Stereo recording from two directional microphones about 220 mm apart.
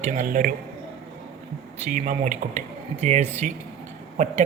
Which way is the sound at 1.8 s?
35° right (ahead or behind).